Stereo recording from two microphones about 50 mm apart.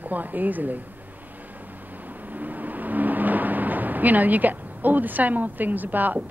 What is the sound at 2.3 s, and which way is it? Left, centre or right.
Speech, right.